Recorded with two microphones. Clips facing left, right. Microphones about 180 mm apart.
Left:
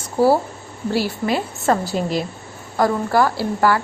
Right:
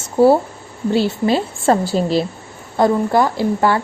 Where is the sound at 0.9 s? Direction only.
25° right (ahead or behind).